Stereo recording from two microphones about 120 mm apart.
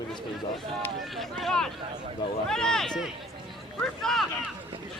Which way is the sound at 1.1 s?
Centre (ahead or behind).